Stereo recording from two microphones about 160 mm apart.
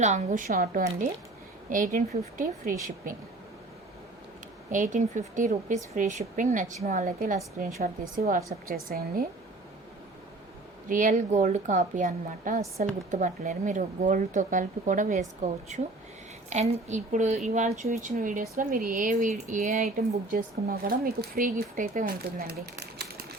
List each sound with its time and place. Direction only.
0.0 s speech: 50° right (ahead or behind)
4.7 s speech: 50° right (ahead or behind)
10.8 s speech: 55° right (ahead or behind); by 23.2 s 80° right